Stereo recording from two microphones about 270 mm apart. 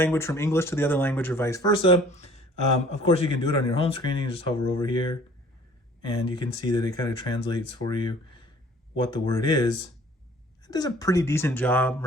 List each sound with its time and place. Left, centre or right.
0.0 s speech: centre